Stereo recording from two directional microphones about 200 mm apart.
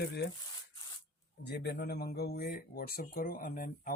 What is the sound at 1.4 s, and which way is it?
Speech, 55° left (ahead or behind).